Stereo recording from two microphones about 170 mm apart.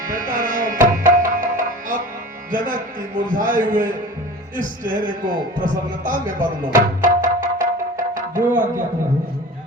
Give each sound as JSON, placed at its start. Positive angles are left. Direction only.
{"t": 0.1, "sound": "tabla", "side_deg": -50}
{"t": 2.5, "sound": "a man's voice", "side_deg": -50}
{"t": 6.7, "sound": "music", "side_deg": -50}